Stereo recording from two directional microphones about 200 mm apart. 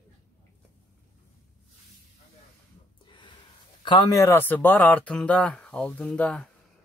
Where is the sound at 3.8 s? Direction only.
25° left (ahead or behind).